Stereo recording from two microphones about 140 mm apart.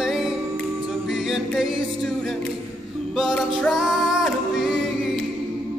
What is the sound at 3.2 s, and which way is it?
Music, centre (ahead or behind).